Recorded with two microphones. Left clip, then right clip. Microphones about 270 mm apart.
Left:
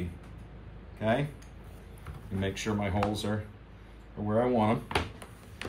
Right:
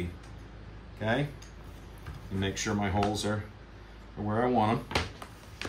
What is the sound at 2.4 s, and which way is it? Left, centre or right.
Speech, centre.